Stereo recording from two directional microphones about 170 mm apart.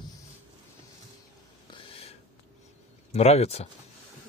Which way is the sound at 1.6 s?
35° left (ahead or behind).